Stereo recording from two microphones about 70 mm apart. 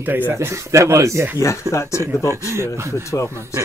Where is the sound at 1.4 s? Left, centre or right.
Left.